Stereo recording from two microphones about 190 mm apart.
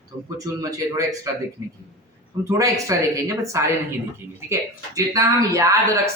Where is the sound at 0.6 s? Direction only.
20° right (ahead or behind).